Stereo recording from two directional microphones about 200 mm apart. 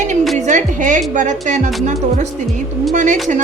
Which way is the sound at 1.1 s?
40° right (ahead or behind).